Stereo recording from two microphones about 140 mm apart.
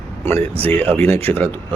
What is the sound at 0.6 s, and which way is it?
Speech, 10° left (ahead or behind).